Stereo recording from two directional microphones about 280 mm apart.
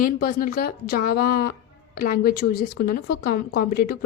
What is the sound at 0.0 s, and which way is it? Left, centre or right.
A woman's voice, left.